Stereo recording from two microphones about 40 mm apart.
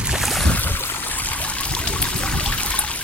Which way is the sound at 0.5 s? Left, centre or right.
Left.